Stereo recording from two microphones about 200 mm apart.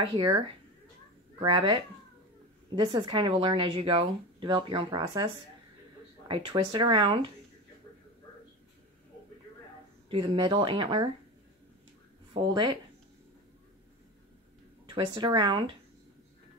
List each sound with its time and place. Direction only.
0.1 s speech: 20° right (ahead or behind)
10.0 s speech: 25° right (ahead or behind)
12.4 s speech: 20° right (ahead or behind)
14.9 s speech: 20° right (ahead or behind)